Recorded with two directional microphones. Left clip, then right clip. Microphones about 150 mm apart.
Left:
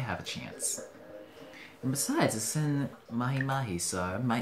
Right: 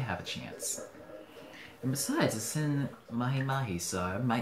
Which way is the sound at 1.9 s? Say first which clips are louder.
Left 2 dB; 25° left (ahead or behind).